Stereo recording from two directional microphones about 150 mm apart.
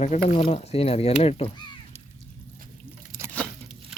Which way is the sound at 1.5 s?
30° left (ahead or behind).